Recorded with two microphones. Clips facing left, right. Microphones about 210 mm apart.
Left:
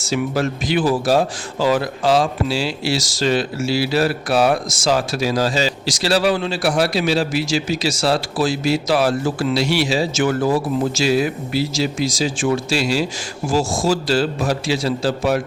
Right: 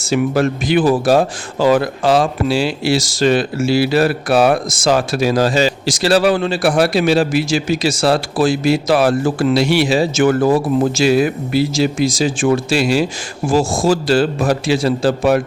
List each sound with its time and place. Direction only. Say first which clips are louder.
0.0 s speech: right 5 dB; 55° right (ahead or behind)